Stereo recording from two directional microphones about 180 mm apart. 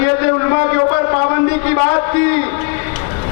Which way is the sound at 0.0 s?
20° left (ahead or behind).